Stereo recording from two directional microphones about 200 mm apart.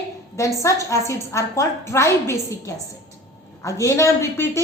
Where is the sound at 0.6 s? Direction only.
15° left (ahead or behind).